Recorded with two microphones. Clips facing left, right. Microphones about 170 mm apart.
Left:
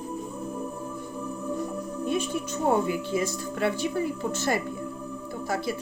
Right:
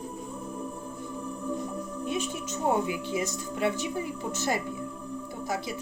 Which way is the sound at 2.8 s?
20° right (ahead or behind).